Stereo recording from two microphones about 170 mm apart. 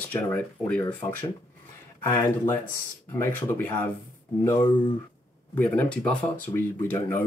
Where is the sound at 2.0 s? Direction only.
15° left (ahead or behind).